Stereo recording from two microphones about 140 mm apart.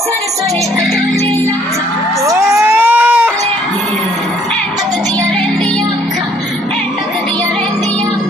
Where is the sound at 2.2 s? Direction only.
20° right (ahead or behind).